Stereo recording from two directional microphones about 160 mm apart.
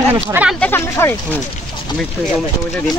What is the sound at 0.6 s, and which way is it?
Speech, 15° left (ahead or behind).